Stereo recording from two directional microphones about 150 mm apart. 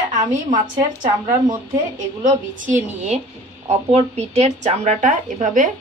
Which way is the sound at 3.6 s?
45° right (ahead or behind).